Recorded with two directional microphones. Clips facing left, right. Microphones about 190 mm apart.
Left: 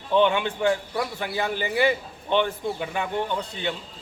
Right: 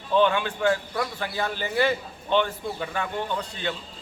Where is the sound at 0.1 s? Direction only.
15° left (ahead or behind).